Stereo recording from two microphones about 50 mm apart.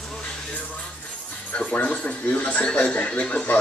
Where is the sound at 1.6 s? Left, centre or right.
Left.